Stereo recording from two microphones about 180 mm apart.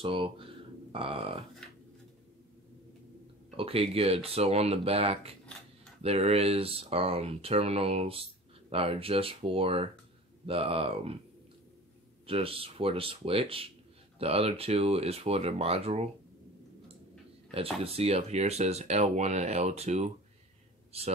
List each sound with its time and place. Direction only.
0.0 s speech: 30° right (ahead or behind)
3.5 s speech: 30° right (ahead or behind)
12.3 s speech: 30° right (ahead or behind)
17.8 s speech: 35° right (ahead or behind)